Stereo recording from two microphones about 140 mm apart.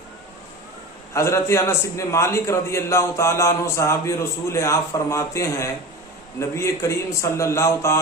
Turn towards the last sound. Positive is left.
turn(degrees=20)  # may be behind; listen again after turning